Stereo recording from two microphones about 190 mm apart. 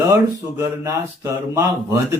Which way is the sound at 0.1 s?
15° right (ahead or behind).